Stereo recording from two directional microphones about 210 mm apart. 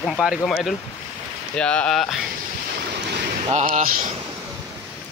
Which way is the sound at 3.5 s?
30° right (ahead or behind).